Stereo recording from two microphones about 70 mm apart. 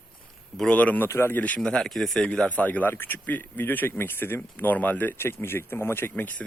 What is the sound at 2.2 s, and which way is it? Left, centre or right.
Speech, centre.